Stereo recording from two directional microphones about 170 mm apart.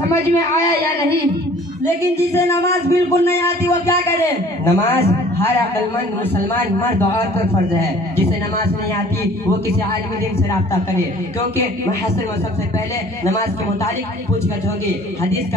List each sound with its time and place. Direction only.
0.1 s a man's voice: 15° left (ahead or behind)
2.1 s a man's voice: 15° left (ahead or behind)
13.2 s a man's voice: 20° left (ahead or behind)